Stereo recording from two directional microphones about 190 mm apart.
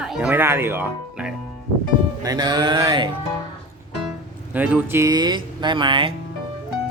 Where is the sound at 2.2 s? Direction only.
20° right (ahead or behind).